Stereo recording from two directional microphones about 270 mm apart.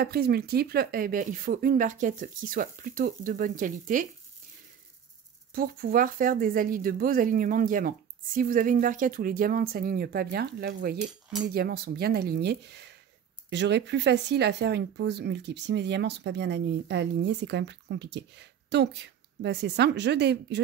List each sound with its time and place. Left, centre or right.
0.0 s speech: right
5.5 s speech: right